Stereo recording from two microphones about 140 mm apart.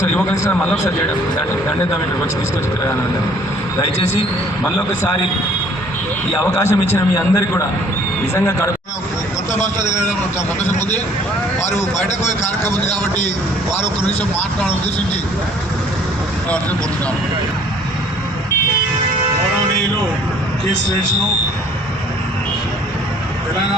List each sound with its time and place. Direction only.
6.5 s a man's voice: 20° left (ahead or behind)
12.9 s a man's voice: 55° left (ahead or behind)
14.2 s speech: 15° left (ahead or behind)